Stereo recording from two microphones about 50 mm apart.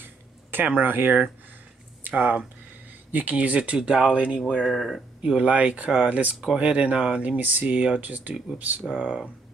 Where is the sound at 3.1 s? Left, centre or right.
Right.